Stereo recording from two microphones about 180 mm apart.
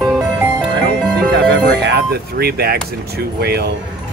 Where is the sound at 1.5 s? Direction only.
75° right (ahead or behind).